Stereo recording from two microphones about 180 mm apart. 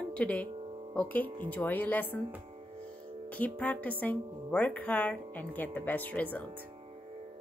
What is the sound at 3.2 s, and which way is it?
Speech, 10° left (ahead or behind).